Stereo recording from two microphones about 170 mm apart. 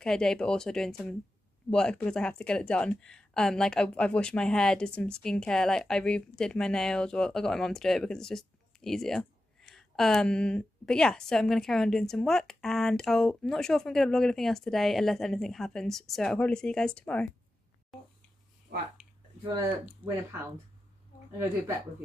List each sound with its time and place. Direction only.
0.0 s speech: 5° left (ahead or behind)
19.4 s speech: 20° right (ahead or behind)
20.0 s speech: 10° right (ahead or behind)